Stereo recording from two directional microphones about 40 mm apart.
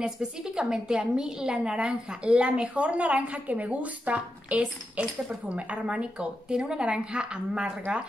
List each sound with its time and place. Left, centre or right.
0.0 s a woman's voice: centre
6.1 s a woman's voice: centre